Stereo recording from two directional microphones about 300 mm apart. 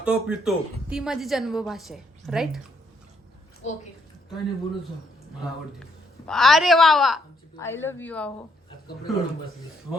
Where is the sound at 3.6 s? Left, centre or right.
Left.